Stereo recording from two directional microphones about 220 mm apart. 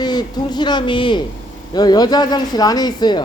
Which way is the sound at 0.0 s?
20° left (ahead or behind).